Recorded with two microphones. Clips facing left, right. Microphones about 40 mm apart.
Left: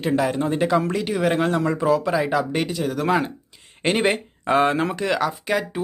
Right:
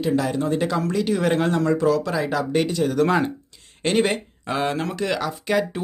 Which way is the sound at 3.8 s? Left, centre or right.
Centre.